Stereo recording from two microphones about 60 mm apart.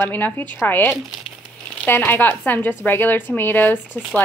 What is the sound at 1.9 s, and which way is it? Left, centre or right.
A woman's voice, left.